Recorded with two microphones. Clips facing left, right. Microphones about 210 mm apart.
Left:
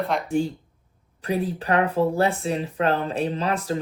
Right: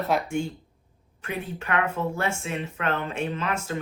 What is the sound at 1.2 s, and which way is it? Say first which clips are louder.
Speech: left 8 dB; 35° left (ahead or behind).